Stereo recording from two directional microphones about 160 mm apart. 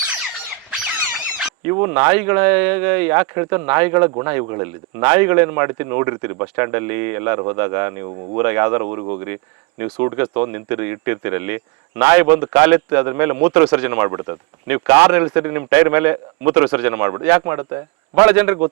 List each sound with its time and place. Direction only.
1.7 s speech: 15° right (ahead or behind)
8.9 s speech: 25° right (ahead or behind)
9.2 s speech: 15° right (ahead or behind)